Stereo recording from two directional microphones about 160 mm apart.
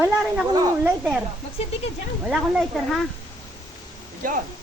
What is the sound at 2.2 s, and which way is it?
Speech, 5° right (ahead or behind).